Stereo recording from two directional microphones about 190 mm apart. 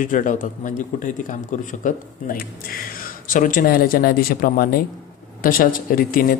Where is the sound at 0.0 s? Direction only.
45° left (ahead or behind).